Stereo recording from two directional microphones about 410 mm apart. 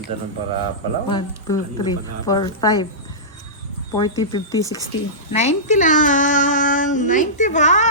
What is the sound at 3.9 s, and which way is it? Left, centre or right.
A child's voice, centre.